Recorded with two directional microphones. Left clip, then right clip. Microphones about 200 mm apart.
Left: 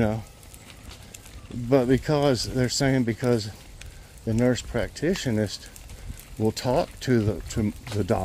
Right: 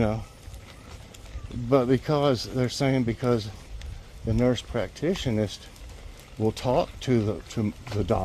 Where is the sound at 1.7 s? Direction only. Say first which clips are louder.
Left 1 dB; 20° left (ahead or behind).